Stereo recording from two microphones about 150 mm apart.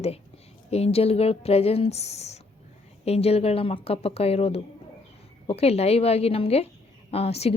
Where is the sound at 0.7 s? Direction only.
40° left (ahead or behind).